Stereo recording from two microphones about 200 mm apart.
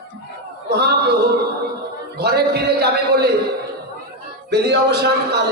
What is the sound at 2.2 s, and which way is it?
A man's voice, 55° right (ahead or behind).